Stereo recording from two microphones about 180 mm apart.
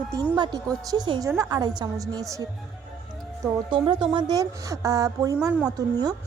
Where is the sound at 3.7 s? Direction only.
25° right (ahead or behind).